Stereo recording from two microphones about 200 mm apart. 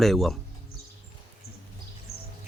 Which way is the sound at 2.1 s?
50° left (ahead or behind).